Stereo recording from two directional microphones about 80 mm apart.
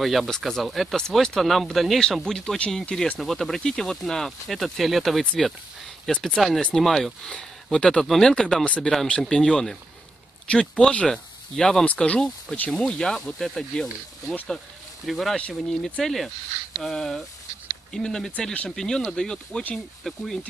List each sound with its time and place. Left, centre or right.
0.0 s speech: centre
5.2 s speech: centre
11.8 s speech: centre